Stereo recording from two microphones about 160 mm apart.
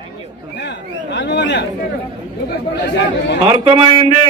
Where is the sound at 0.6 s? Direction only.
90° left.